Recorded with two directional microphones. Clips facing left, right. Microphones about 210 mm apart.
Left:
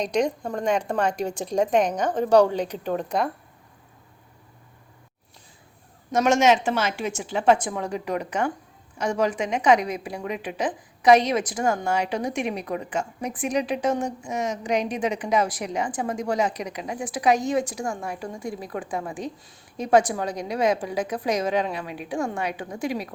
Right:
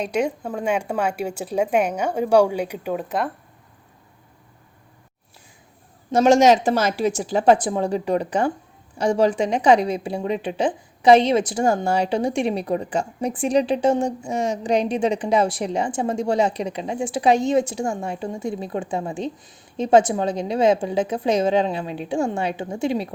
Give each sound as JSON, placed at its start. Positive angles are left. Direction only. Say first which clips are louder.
{"t": 0.0, "sound": "speech", "louder": "right 1 dB", "side_deg": -5}
{"t": 6.1, "sound": "a woman's voice", "louder": "right 5 dB", "side_deg": -30}